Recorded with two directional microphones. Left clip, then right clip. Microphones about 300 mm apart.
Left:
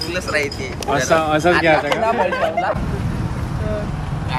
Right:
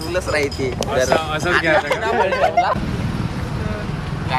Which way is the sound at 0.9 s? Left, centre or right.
Centre.